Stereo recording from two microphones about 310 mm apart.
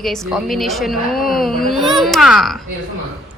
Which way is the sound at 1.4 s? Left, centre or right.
Centre.